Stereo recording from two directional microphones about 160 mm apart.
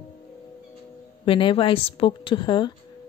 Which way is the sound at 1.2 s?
35° left (ahead or behind).